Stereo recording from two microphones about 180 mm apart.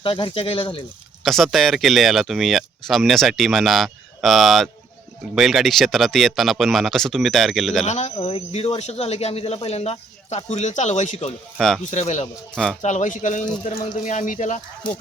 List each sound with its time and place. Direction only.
0.0 s speech: 30° left (ahead or behind)
1.2 s speech: centre (ahead or behind)
7.9 s speech: 40° left (ahead or behind)
11.5 s speech: centre (ahead or behind)
11.9 s speech: 40° left (ahead or behind)